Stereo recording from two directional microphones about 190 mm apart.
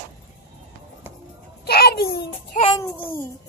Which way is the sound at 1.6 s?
55° left (ahead or behind).